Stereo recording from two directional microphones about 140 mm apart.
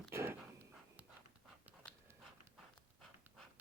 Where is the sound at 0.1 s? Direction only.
20° right (ahead or behind).